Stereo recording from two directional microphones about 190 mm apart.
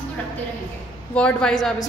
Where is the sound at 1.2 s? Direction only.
5° left (ahead or behind).